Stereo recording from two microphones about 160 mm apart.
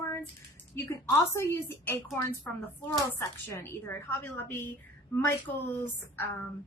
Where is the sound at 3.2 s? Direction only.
15° left (ahead or behind).